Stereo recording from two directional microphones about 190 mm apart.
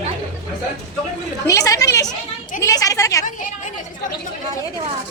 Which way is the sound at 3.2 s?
40° left (ahead or behind).